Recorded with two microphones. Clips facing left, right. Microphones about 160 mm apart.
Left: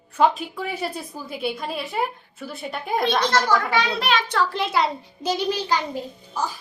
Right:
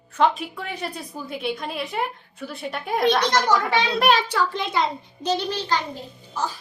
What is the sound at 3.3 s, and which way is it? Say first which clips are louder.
Speech: even; 20° right (ahead or behind).